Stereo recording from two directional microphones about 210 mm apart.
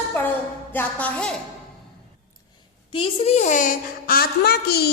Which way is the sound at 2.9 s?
30° left (ahead or behind).